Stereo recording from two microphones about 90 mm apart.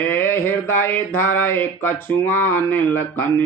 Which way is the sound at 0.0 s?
25° left (ahead or behind).